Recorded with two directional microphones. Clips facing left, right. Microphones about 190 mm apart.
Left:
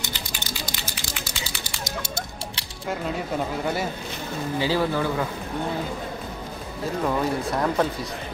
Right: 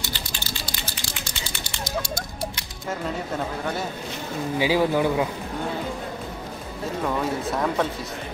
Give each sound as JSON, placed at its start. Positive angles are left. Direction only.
{"t": 0.7, "sound": "typing", "side_deg": 0}
{"t": 2.0, "sound": "a sound", "side_deg": 25}
{"t": 4.6, "sound": "speech", "side_deg": -15}
{"t": 7.0, "sound": "speech", "side_deg": 5}